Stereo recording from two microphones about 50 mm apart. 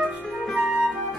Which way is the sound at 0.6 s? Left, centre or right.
Right.